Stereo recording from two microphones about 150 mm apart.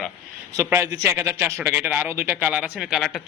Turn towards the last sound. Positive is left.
turn(degrees=0)  # may be behind; listen again after turning